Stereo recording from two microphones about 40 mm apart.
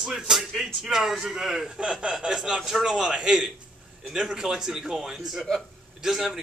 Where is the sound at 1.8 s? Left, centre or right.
Right.